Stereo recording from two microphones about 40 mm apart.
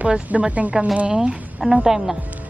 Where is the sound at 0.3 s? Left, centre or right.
Right.